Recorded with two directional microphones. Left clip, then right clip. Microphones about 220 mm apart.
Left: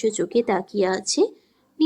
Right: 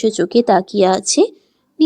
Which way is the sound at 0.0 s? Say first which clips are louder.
Right 7 dB; 30° right (ahead or behind).